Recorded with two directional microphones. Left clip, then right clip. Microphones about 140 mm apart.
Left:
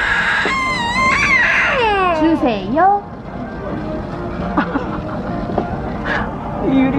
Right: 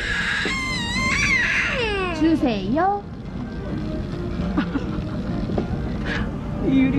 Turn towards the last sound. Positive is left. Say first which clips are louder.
# left 5 dB
turn(degrees=15)  # may be behind; listen again after turning